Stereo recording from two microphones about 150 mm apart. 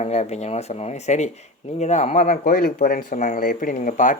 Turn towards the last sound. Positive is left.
turn(degrees=60)  # may be behind; listen again after turning